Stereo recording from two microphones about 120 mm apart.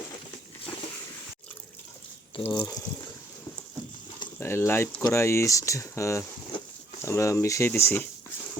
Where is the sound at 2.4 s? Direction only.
25° left (ahead or behind).